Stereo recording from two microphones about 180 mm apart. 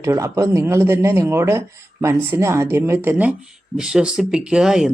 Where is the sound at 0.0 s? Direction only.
15° right (ahead or behind).